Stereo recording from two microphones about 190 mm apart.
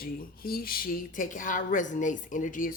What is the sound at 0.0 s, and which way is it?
Speech, 50° left (ahead or behind).